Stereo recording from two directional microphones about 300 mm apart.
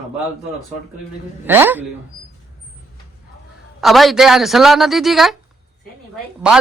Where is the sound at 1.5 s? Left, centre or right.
Centre.